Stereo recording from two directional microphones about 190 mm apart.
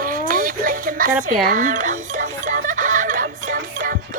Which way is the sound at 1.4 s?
40° right (ahead or behind).